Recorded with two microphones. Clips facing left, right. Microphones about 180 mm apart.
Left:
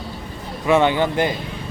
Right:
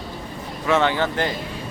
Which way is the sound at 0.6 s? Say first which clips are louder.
Left 3 dB; 15° left (ahead or behind).